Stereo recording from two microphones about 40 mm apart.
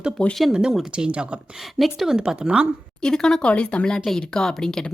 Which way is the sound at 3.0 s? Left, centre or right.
Centre.